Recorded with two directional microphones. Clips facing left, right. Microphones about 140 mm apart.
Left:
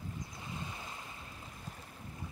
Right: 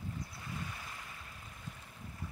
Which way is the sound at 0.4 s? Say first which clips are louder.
Left 1 dB; 20° left (ahead or behind).